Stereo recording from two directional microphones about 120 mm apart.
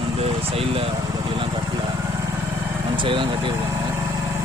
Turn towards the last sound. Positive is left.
turn(degrees=-45)  # may be behind; listen again after turning